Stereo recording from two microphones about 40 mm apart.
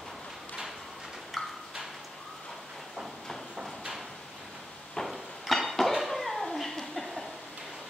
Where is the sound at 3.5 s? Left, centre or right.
Centre.